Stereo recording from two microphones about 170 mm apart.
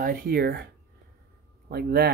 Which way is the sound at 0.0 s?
60° right (ahead or behind).